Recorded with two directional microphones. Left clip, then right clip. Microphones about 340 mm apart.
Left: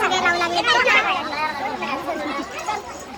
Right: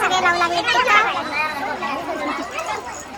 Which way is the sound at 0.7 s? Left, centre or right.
Centre.